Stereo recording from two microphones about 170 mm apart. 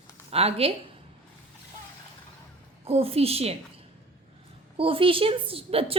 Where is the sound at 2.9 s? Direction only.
35° right (ahead or behind).